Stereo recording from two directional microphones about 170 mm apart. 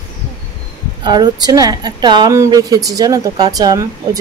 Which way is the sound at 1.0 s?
25° right (ahead or behind).